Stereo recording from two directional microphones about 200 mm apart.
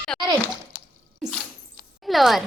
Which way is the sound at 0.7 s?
45° left (ahead or behind).